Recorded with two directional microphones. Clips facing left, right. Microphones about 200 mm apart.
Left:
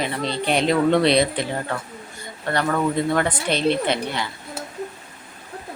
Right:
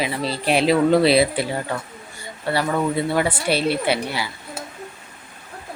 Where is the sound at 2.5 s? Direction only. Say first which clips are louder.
Even; 10° right (ahead or behind).